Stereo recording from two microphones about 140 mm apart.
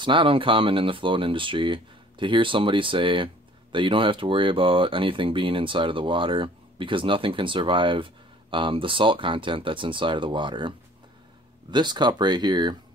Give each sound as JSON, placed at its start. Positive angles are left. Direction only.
{"t": 0.0, "sound": "speech", "side_deg": -35}
{"t": 11.7, "sound": "speech", "side_deg": -30}